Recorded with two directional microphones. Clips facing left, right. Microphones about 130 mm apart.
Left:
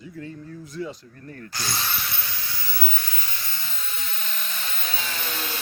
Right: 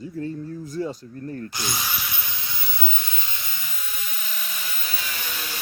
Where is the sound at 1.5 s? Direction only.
15° right (ahead or behind).